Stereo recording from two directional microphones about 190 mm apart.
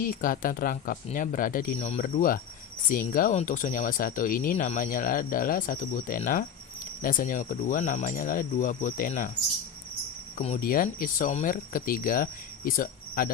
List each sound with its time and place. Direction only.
0.0 s speech: 45° left (ahead or behind)
10.3 s speech: 40° left (ahead or behind)